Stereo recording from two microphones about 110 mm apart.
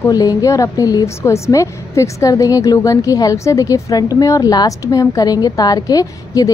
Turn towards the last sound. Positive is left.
turn(degrees=35)  # may be behind; listen again after turning